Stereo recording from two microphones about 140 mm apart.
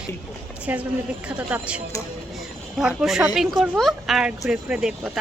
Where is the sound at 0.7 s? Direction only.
10° right (ahead or behind).